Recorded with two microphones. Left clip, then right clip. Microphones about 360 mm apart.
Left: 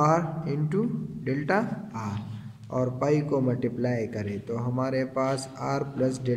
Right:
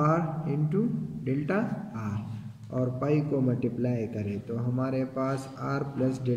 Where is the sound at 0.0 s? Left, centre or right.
Centre.